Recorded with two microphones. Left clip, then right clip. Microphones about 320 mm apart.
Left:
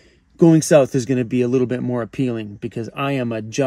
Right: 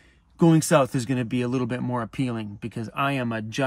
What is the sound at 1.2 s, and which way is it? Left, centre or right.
Speech, centre.